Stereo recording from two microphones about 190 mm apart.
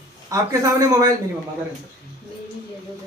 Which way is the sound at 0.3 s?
15° right (ahead or behind).